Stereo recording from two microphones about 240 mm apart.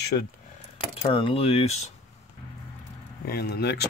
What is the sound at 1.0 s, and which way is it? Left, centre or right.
Speech, left.